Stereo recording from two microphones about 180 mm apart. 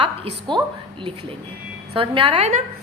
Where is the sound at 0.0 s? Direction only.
25° right (ahead or behind).